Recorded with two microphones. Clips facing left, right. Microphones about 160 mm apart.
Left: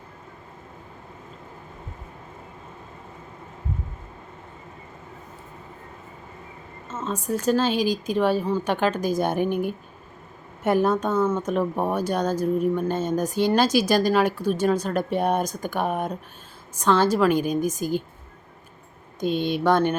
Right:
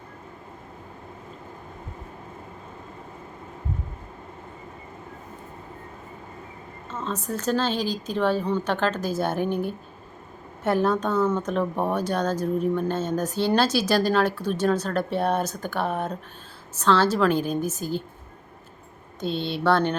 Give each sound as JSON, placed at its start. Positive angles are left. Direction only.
{"t": 6.9, "sound": "speech", "side_deg": 5}
{"t": 19.2, "sound": "speech", "side_deg": 15}